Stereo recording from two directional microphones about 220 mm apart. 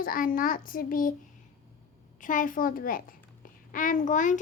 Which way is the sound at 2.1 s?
35° left (ahead or behind).